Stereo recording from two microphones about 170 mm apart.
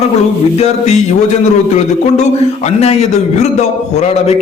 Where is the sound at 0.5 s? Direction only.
40° left (ahead or behind).